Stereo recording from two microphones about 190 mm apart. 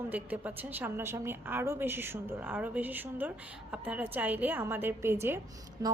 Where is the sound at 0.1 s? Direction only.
10° right (ahead or behind).